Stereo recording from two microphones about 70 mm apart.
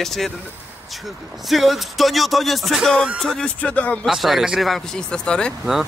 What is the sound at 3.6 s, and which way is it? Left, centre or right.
Speech, left.